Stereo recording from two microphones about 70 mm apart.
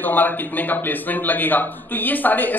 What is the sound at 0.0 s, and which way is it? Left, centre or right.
A man's voice, left.